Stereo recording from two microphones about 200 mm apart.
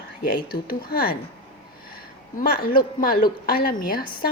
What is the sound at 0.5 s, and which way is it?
Speech, 50° left (ahead or behind).